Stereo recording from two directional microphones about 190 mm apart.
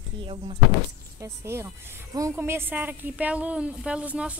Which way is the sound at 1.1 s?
15° right (ahead or behind).